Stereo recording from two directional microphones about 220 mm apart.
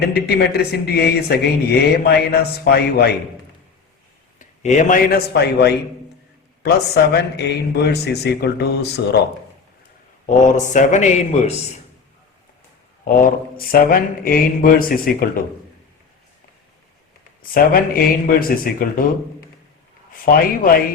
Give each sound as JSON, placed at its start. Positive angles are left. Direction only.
{"t": 0.0, "sound": "speech", "side_deg": 45}
{"t": 4.4, "sound": "a man's voice", "side_deg": 35}
{"t": 10.2, "sound": "mantra", "side_deg": 35}
{"t": 13.2, "sound": "mantra", "side_deg": 40}
{"t": 17.5, "sound": "mantra", "side_deg": 40}
{"t": 20.1, "sound": "mantra", "side_deg": 40}